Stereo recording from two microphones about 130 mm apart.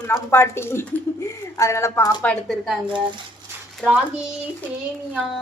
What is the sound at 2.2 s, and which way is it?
Speech, 5° left (ahead or behind).